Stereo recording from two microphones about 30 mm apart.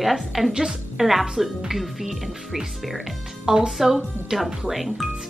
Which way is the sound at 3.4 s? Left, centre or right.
Right.